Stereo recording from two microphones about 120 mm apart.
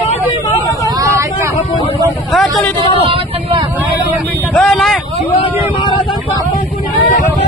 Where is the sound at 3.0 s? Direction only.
50° right (ahead or behind).